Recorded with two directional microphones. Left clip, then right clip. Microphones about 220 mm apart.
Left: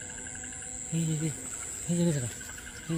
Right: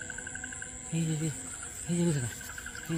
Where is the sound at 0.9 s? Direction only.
15° left (ahead or behind).